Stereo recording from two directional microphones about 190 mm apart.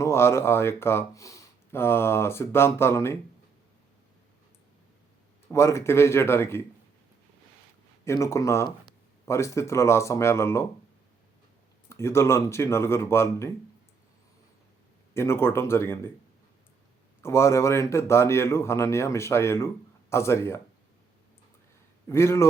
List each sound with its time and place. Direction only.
0.0 s a man's voice: 15° left (ahead or behind)
5.5 s a man's voice: 15° left (ahead or behind)
8.0 s a man's voice: 15° left (ahead or behind)
11.9 s a man's voice: 15° left (ahead or behind)
15.1 s a man's voice: 15° left (ahead or behind)
17.2 s a man's voice: 15° left (ahead or behind)
22.1 s a man's voice: 15° left (ahead or behind)